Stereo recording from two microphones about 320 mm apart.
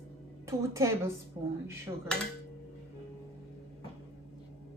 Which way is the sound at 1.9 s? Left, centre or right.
Centre.